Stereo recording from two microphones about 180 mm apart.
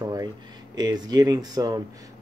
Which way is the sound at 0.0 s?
20° right (ahead or behind).